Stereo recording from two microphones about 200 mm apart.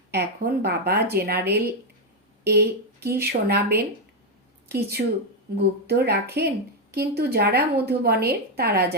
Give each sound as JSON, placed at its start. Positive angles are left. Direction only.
{"t": 0.1, "sound": "a woman's voice", "side_deg": -55}
{"t": 5.0, "sound": "speech", "side_deg": -40}
{"t": 5.5, "sound": "a woman's voice", "side_deg": -55}